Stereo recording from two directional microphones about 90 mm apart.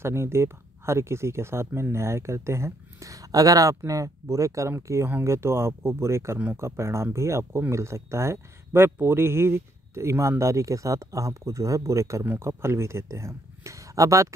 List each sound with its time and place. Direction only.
0.0 s speech: 30° right (ahead or behind)